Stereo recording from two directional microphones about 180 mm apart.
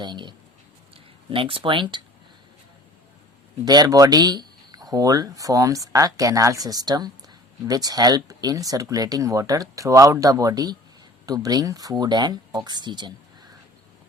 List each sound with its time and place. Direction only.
0.0 s speech: 25° right (ahead or behind)
3.7 s speech: 20° right (ahead or behind)